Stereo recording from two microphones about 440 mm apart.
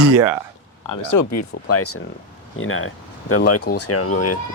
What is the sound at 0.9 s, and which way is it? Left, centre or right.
Speech, left.